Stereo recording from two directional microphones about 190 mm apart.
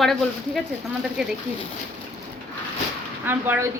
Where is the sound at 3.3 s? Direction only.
10° right (ahead or behind).